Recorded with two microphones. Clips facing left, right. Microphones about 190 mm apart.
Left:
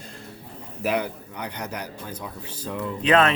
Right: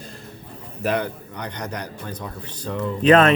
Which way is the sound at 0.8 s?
10° left (ahead or behind).